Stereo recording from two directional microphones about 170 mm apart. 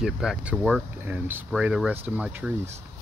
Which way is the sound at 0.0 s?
5° right (ahead or behind).